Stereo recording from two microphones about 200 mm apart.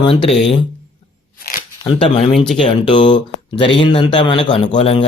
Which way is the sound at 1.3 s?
45° left (ahead or behind).